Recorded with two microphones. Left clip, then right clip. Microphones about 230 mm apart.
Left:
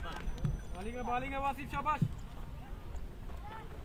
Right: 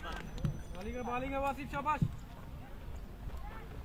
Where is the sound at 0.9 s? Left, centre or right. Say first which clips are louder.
Left 1 dB; left.